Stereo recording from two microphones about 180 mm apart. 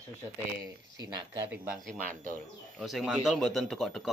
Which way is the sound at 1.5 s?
10° right (ahead or behind).